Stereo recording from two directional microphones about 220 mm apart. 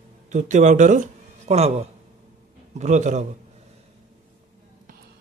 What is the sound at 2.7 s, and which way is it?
Speech, 35° right (ahead or behind).